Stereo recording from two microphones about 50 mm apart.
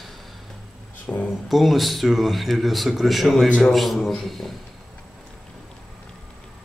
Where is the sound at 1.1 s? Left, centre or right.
Left.